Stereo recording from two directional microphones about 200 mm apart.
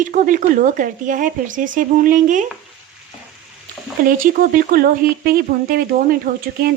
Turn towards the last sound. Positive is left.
turn(degrees=-50)  # may be behind; listen again after turning